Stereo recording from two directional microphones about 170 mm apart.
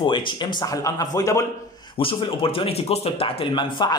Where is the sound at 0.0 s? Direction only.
25° left (ahead or behind).